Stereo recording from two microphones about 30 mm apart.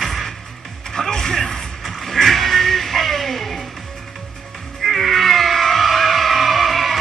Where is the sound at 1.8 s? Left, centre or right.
Centre.